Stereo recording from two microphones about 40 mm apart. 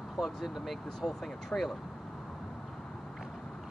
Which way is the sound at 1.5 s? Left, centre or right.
Left.